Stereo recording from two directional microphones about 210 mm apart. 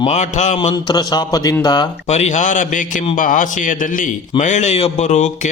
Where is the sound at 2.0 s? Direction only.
30° left (ahead or behind).